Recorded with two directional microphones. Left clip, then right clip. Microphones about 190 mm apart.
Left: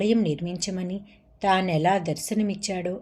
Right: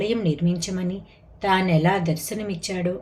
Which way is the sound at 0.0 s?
45° left (ahead or behind).